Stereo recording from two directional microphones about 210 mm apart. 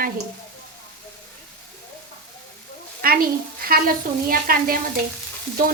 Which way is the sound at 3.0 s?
45° right (ahead or behind).